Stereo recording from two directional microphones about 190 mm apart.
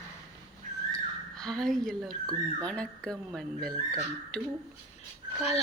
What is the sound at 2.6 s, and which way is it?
A woman's voice, 5° left (ahead or behind).